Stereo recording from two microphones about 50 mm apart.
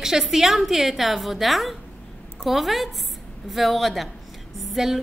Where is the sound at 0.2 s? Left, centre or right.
Centre.